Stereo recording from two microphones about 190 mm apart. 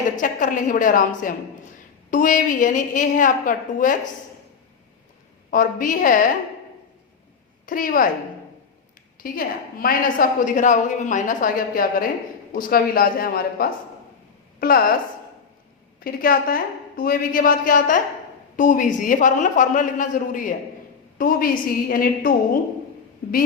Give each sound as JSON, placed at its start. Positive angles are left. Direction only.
{"t": 0.2, "sound": "a woman's voice", "side_deg": 45}
{"t": 5.5, "sound": "a woman's voice", "side_deg": 45}
{"t": 7.7, "sound": "a woman's voice", "side_deg": 45}
{"t": 9.2, "sound": "a woman's voice", "side_deg": 50}
{"t": 16.0, "sound": "a woman's voice", "side_deg": 50}